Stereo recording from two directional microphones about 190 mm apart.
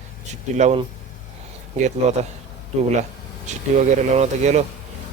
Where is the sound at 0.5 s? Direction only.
35° right (ahead or behind).